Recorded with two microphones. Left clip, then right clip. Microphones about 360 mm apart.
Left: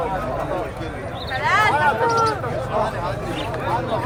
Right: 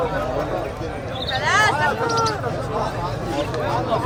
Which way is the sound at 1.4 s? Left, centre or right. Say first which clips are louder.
Even; left.